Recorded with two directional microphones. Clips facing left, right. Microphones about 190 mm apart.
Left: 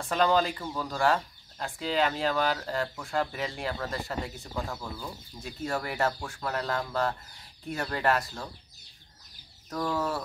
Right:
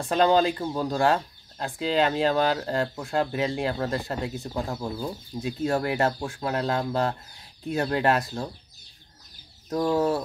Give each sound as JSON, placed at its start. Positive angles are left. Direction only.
{"t": 0.0, "sound": "speech", "side_deg": -25}
{"t": 9.7, "sound": "speech", "side_deg": -25}